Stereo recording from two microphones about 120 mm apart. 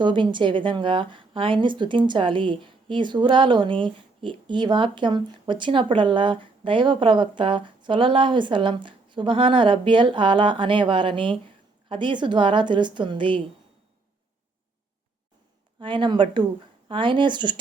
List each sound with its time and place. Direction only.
0.0 s a woman's voice: 40° right (ahead or behind)
15.8 s speech: 40° right (ahead or behind)